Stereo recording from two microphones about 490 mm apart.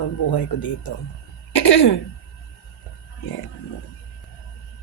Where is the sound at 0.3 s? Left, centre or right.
Left.